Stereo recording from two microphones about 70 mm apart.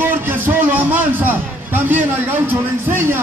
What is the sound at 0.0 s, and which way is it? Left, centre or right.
A man's voice, right.